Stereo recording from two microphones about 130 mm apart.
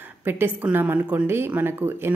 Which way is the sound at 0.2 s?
15° right (ahead or behind).